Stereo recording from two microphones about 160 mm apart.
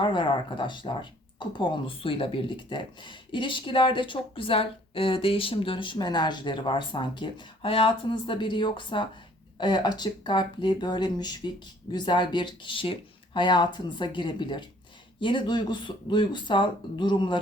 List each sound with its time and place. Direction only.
0.0 s speech: 30° left (ahead or behind)